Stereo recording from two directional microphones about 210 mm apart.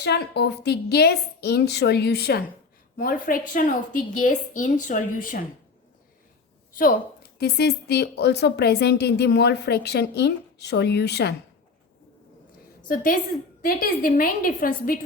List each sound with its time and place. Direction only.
0.0 s a woman's voice: 55° left (ahead or behind)
6.7 s a woman's voice: 45° left (ahead or behind)
12.9 s a woman's voice: 40° left (ahead or behind)